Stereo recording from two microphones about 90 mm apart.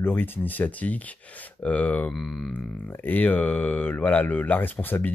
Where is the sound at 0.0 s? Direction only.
20° left (ahead or behind).